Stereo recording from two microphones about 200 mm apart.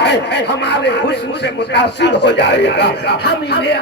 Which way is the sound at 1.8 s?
60° left (ahead or behind).